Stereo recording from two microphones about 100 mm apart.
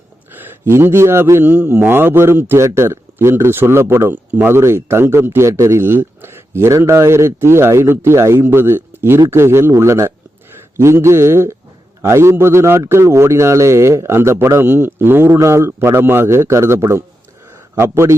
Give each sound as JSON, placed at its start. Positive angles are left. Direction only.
{"t": 0.3, "sound": "speech", "side_deg": -20}